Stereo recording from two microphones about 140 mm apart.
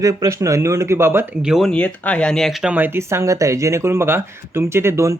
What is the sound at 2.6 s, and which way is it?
Speech, 15° right (ahead or behind).